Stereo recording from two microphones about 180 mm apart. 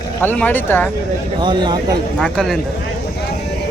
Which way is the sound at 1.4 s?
25° right (ahead or behind).